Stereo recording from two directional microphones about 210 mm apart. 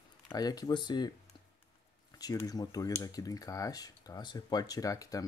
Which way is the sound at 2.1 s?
15° left (ahead or behind).